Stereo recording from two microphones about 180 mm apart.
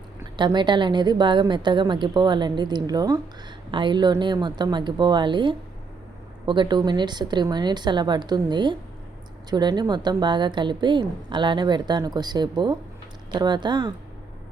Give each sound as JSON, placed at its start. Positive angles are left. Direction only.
{"t": 0.3, "sound": "a woman's voice", "side_deg": -25}